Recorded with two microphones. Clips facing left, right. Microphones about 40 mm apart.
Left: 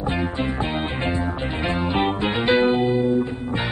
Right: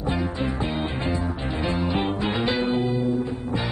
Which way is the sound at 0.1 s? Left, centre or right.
Left.